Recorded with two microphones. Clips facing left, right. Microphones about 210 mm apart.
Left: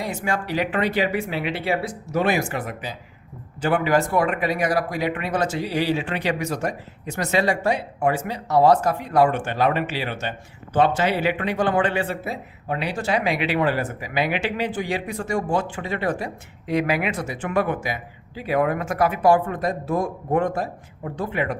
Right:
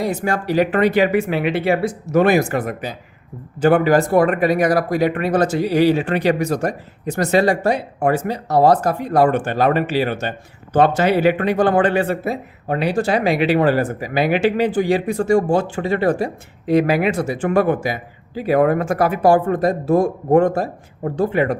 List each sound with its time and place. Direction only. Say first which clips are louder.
0.0 s speech: right 6 dB; 40° right (ahead or behind)